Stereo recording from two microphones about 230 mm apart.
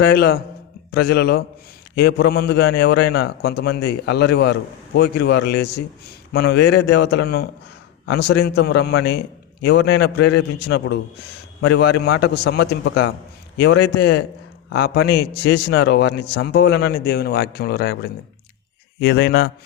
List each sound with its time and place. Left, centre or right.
0.1 s a man's voice: left